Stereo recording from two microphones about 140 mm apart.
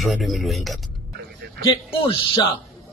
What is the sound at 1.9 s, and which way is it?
Speech, 40° left (ahead or behind).